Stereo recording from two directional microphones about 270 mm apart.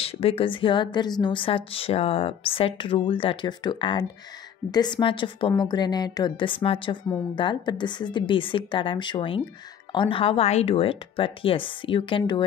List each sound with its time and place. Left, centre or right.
0.0 s a woman's voice: left